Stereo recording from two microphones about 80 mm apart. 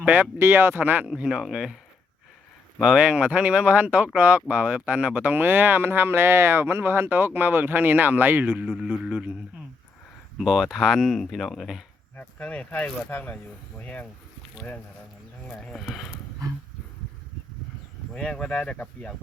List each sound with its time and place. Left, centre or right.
0.0 s speech: right
2.8 s speech: centre
8.6 s speech: centre
10.3 s speech: centre
12.1 s speech: centre
12.8 s speech: left
15.4 s speech: centre
18.1 s speech: centre